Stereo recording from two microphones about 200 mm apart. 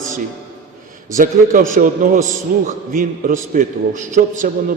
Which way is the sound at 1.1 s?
40° right (ahead or behind).